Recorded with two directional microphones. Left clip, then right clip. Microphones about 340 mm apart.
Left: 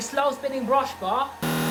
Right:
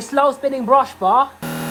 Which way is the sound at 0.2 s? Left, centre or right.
Centre.